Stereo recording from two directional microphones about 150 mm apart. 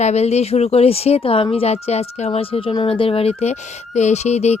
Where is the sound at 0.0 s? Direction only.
45° left (ahead or behind).